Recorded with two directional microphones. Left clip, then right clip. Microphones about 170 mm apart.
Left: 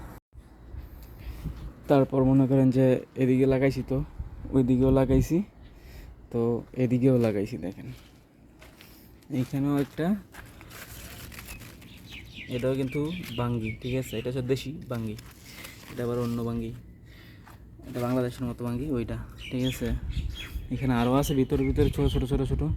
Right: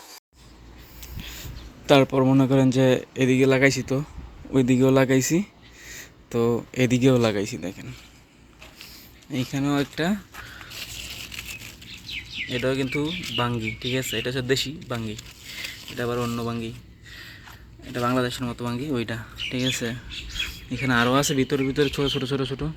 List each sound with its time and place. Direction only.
1.9 s speech: 5° left (ahead or behind)
4.5 s a sound: centre (ahead or behind)
6.7 s speech: centre (ahead or behind)
9.5 s speech: 5° left (ahead or behind)
12.5 s speech: centre (ahead or behind)
15.5 s a sound: 15° left (ahead or behind)
16.0 s speech: centre (ahead or behind); by 22.7 s 15° left (ahead or behind)